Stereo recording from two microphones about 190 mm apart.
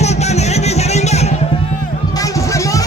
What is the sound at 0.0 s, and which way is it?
Music, 35° left (ahead or behind).